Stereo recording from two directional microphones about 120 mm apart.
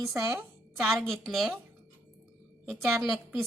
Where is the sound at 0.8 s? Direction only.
Centre (ahead or behind).